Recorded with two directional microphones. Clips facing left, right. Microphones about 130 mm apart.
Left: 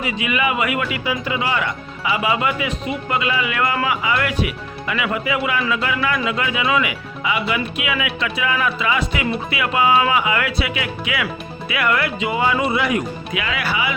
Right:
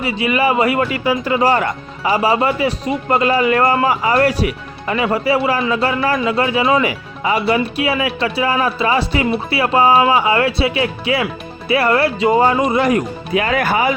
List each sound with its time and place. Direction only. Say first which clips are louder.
0.0 s speech: right 5 dB; 35° right (ahead or behind)